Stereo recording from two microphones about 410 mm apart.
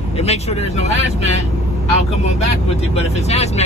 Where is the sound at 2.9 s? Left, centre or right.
Centre.